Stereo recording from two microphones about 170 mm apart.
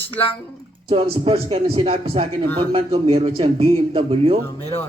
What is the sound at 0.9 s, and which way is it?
Speech, 35° right (ahead or behind).